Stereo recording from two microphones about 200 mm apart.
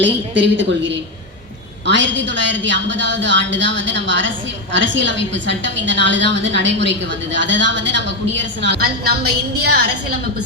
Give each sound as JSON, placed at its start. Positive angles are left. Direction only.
{"t": 0.0, "sound": "a woman's voice", "side_deg": -65}